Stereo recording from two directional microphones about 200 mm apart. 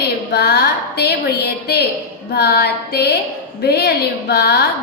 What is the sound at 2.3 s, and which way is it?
Music, 55° left (ahead or behind).